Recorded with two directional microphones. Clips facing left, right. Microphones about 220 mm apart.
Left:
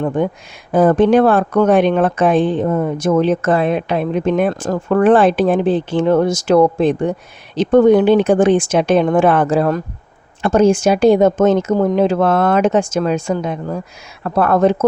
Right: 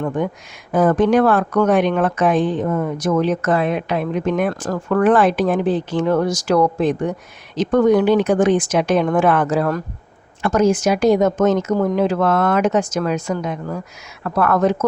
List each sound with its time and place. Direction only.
0.0 s speech: 30° left (ahead or behind)